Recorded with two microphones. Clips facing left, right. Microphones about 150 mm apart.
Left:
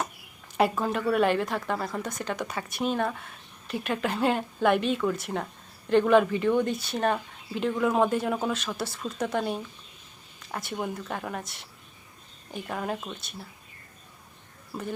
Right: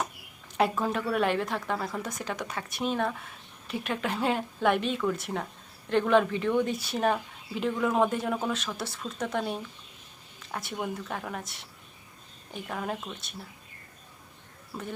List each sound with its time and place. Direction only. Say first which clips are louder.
0.5 s speech: left 2 dB; centre (ahead or behind)